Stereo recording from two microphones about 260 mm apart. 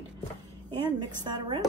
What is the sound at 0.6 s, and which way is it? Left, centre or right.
Speech, centre.